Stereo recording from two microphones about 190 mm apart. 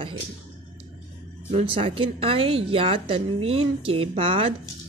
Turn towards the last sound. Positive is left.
turn(degrees=-30)  # may be behind; listen again after turning